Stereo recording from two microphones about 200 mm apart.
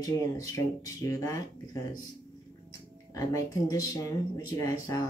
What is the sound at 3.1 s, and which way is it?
Speech, 15° left (ahead or behind).